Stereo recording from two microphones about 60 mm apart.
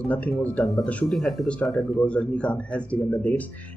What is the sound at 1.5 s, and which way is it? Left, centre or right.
Speech, centre.